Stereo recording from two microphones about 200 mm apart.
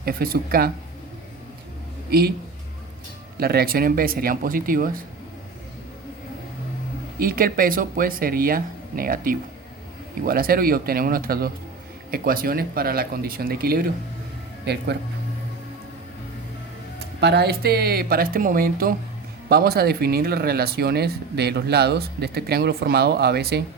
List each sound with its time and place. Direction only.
0.0 s speech: 50° right (ahead or behind)
2.0 s speech: 50° right (ahead or behind)
3.3 s speech: 50° right (ahead or behind)
7.2 s speech: 45° right (ahead or behind)
17.2 s speech: 55° right (ahead or behind)